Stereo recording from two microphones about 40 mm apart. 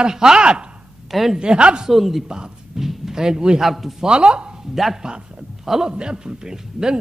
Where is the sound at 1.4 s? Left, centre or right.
Right.